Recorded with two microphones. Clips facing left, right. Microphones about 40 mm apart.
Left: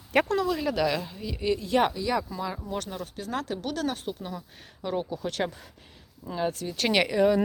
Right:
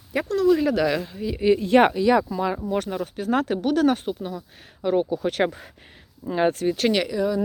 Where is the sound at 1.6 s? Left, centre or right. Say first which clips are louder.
Right 7 dB; right.